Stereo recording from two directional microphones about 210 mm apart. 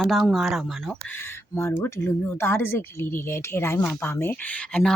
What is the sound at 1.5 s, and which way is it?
Speech, 10° left (ahead or behind).